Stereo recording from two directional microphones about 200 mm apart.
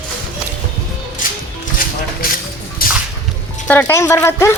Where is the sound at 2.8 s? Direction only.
45° left (ahead or behind).